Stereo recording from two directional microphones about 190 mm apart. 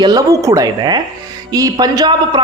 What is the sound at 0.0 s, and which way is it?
A man's voice, 20° right (ahead or behind).